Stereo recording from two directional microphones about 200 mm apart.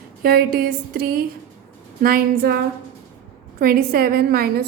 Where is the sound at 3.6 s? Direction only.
50° right (ahead or behind).